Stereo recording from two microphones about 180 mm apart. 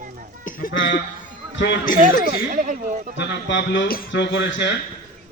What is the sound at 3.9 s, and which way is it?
Speech, 65° left (ahead or behind).